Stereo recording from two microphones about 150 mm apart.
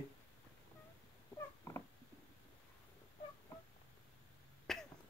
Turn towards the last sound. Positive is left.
turn(degrees=5)  # may be behind; listen again after turning